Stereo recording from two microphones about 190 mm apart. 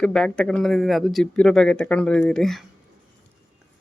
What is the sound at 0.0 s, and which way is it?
Speech, 5° left (ahead or behind).